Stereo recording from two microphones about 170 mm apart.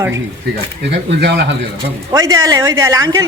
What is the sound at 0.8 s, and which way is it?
Speech, 90° right.